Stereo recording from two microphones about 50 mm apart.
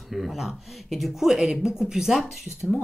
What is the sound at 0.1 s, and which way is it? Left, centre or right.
Speech, centre.